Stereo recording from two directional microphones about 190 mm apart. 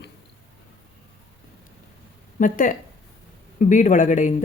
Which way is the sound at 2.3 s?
45° left (ahead or behind).